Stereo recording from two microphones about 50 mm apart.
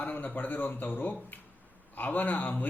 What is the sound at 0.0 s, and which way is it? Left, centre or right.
Speech, left.